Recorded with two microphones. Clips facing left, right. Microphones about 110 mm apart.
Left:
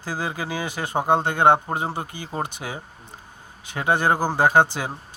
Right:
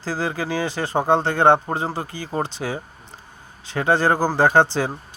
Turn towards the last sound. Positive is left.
turn(degrees=15)  # may be behind; listen again after turning